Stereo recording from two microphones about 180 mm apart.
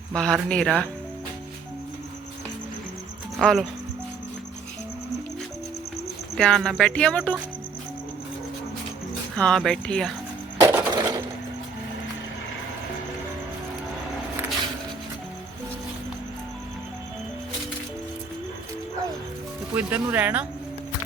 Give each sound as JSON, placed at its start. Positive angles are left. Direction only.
{"t": 0.1, "sound": "speech", "side_deg": 5}
{"t": 3.3, "sound": "speech", "side_deg": 0}
{"t": 6.3, "sound": "speech", "side_deg": 0}
{"t": 9.3, "sound": "speech", "side_deg": 5}
{"t": 10.6, "sound": "a sound", "side_deg": -15}
{"t": 10.9, "sound": "sewing machine", "side_deg": -20}
{"t": 19.7, "sound": "speech", "side_deg": -10}